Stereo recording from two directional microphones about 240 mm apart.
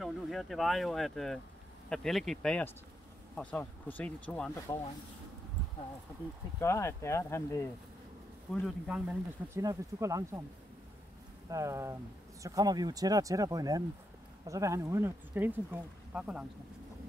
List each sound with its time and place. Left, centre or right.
0.0 s speech: centre
4.7 s speech: centre
6.6 s speech: centre
8.5 s speech: centre
11.4 s speech: centre